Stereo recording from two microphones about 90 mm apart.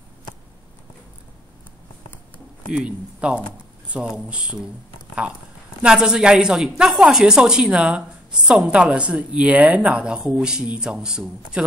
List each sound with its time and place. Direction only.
2.7 s a woman's voice: 10° right (ahead or behind)
5.8 s a woman's voice: 10° right (ahead or behind)